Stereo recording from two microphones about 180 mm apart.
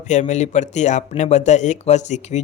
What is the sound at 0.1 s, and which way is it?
Speech, 40° left (ahead or behind).